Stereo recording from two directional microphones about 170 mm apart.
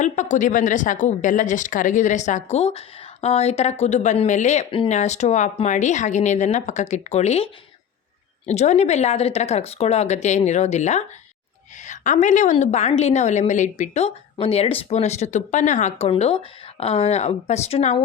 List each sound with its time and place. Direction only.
0.0 s a woman's voice: 45° left (ahead or behind)